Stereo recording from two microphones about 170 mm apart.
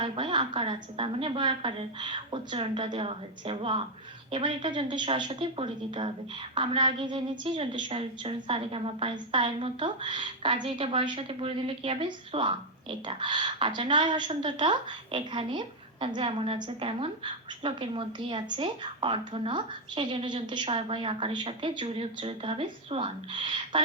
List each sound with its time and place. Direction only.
0.0 s a woman's voice: 30° right (ahead or behind)